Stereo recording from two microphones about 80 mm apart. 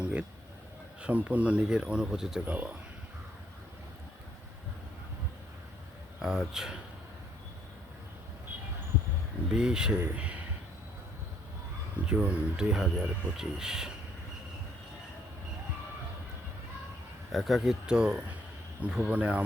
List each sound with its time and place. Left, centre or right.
0.0 s a sound: centre
1.0 s speech: centre
2.5 s speech: right
6.1 s speech: centre
9.5 s speech: centre
12.0 s speech: centre
17.3 s speech: centre